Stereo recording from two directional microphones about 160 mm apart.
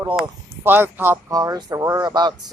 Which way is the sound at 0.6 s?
10° right (ahead or behind).